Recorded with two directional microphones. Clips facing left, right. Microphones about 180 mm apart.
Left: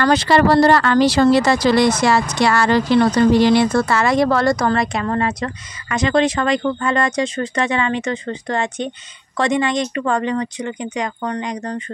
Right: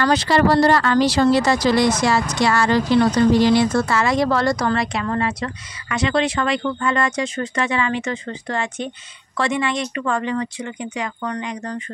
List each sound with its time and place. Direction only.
0.0 s speech: 60° left (ahead or behind); by 11.8 s 35° left (ahead or behind)